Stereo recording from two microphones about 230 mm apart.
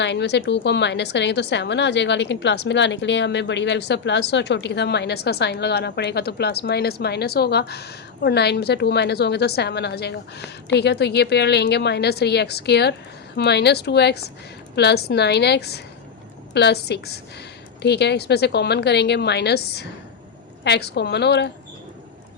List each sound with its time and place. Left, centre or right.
0.0 s a woman's voice: left